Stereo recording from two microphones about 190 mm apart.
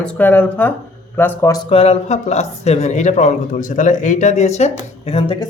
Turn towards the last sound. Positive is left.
turn(degrees=35)  # may be behind; listen again after turning